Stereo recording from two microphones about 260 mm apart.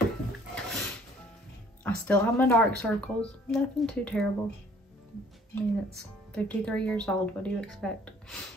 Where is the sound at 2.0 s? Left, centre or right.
Centre.